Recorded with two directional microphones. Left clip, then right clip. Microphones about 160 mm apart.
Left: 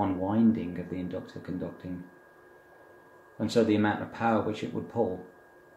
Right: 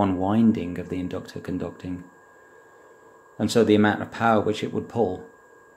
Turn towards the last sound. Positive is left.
turn(degrees=-65)  # may be behind; listen again after turning